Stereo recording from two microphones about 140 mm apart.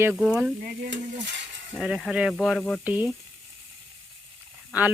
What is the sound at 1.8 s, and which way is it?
Speech, centre (ahead or behind).